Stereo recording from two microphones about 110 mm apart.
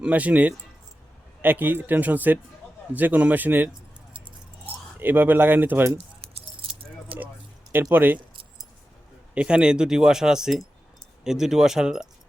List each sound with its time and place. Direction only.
0.0 s speech: 15° right (ahead or behind)
4.9 s speech: 20° right (ahead or behind)
6.6 s keys jangling: 55° right (ahead or behind)
7.7 s speech: 20° right (ahead or behind)
9.3 s speech: 10° right (ahead or behind)